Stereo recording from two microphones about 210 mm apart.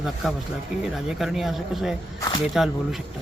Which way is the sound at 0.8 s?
Centre (ahead or behind).